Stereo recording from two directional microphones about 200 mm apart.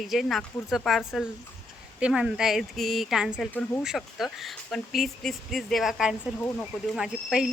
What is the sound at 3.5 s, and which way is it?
A woman's voice, 10° left (ahead or behind).